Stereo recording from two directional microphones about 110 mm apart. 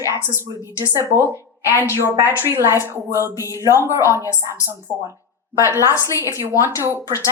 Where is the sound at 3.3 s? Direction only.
30° left (ahead or behind).